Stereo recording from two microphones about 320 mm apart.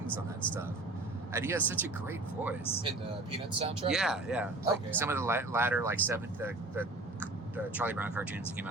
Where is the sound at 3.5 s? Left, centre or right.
Centre.